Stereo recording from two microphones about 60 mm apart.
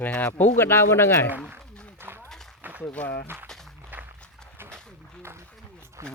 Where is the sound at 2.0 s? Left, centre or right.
Right.